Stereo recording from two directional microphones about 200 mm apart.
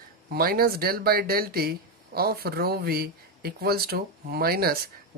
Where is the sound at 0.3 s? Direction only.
50° right (ahead or behind).